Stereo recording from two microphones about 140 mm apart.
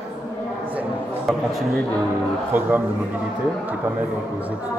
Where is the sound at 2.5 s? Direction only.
15° right (ahead or behind).